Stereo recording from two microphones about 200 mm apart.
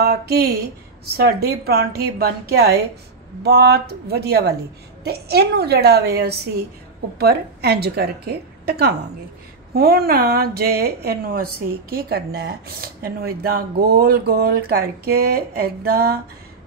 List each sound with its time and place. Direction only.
0.0 s speech: 50° right (ahead or behind)